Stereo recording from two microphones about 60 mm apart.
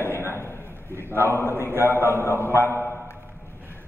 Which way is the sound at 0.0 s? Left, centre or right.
Left.